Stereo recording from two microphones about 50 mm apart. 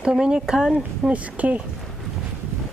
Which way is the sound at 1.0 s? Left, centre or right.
Right.